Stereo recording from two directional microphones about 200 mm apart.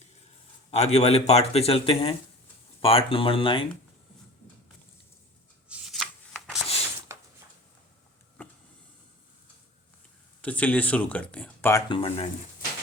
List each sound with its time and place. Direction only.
0.7 s speech: 30° left (ahead or behind)
5.6 s shuffling cards: 5° right (ahead or behind)
7.1 s a sound: 15° right (ahead or behind)
8.4 s vehicle: 10° left (ahead or behind)
10.4 s speech: 5° left (ahead or behind)
11.9 s speech: 25° left (ahead or behind)